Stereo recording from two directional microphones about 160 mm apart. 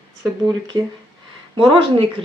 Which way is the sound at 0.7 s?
25° right (ahead or behind).